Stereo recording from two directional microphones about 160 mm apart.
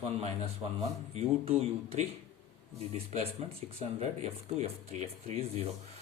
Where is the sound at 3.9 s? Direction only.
40° right (ahead or behind).